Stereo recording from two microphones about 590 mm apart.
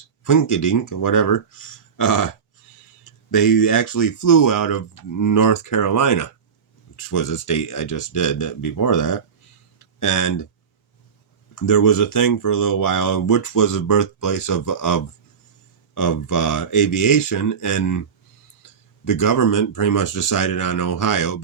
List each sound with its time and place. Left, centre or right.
0.3 s speech: left
3.3 s speech: left
11.6 s speech: left
19.0 s speech: left